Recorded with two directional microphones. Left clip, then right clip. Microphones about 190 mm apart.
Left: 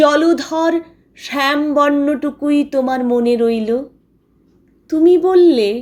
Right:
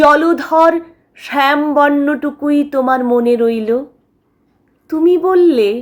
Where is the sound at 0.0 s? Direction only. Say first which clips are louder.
Right 2 dB; 15° left (ahead or behind).